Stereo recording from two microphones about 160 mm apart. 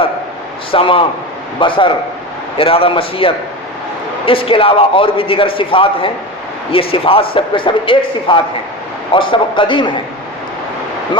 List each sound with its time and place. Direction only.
0.7 s a man's voice: 35° left (ahead or behind)